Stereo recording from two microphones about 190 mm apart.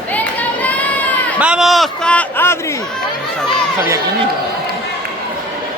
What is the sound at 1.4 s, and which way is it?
A man's voice, 5° right (ahead or behind).